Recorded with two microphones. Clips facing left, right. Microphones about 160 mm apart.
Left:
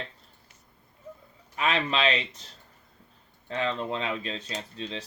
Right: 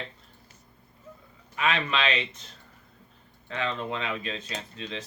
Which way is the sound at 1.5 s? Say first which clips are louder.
Left 1 dB; 35° left (ahead or behind).